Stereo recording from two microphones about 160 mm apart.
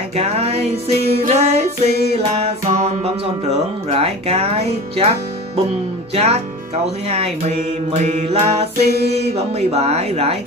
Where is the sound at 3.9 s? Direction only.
40° right (ahead or behind).